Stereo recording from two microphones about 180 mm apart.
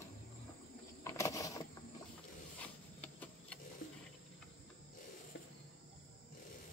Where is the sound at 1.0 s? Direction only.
15° left (ahead or behind).